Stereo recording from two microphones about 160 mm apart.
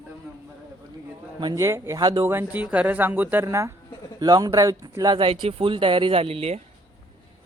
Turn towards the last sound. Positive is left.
turn(degrees=-40)  # may be behind; listen again after turning